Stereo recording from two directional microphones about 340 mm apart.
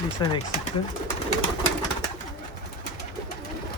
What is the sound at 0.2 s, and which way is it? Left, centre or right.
Speech, centre.